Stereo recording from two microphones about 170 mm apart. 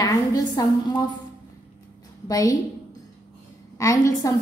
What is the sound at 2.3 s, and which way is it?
Speech, 20° left (ahead or behind).